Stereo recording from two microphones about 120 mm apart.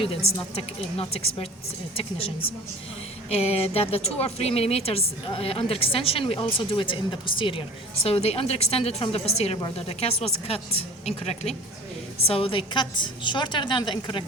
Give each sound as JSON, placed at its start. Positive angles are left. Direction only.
{"t": 0.9, "sound": "a woman's voice", "side_deg": 55}
{"t": 8.0, "sound": "a woman's voice", "side_deg": 55}
{"t": 12.3, "sound": "a woman's voice", "side_deg": 50}